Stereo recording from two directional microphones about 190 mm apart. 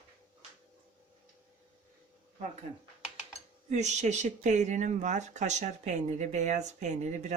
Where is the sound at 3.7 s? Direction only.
40° right (ahead or behind).